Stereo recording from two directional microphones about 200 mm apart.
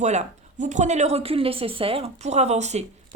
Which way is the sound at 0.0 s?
35° right (ahead or behind).